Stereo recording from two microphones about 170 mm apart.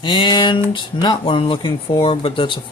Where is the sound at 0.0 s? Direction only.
25° left (ahead or behind).